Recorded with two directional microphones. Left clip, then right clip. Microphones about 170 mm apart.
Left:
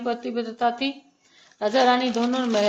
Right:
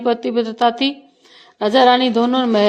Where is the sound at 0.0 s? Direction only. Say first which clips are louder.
Right 9 dB; 55° right (ahead or behind).